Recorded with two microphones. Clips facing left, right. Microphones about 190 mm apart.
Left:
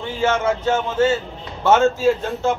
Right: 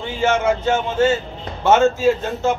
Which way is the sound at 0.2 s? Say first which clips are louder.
Right 2 dB; 10° right (ahead or behind).